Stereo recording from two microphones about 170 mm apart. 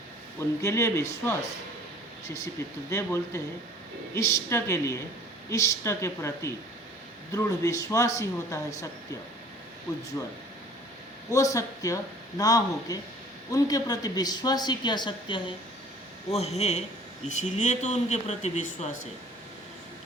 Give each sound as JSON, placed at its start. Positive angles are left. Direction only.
{"t": 0.3, "sound": "speech", "side_deg": 15}
{"t": 2.2, "sound": "a woman's voice", "side_deg": 20}
{"t": 10.2, "sound": "a woman's voice", "side_deg": 15}
{"t": 16.3, "sound": "a man's voice", "side_deg": 40}